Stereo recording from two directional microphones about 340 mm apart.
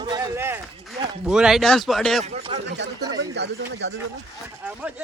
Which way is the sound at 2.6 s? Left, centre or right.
Right.